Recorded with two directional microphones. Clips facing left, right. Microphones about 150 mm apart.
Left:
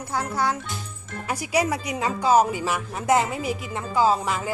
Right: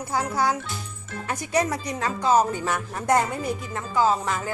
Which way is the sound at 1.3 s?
10° left (ahead or behind).